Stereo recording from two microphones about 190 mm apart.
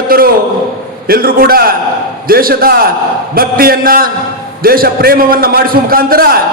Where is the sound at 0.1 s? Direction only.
50° right (ahead or behind).